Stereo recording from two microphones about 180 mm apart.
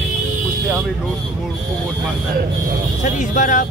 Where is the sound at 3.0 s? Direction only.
45° left (ahead or behind).